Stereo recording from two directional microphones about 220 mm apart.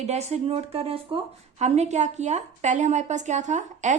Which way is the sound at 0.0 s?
30° right (ahead or behind).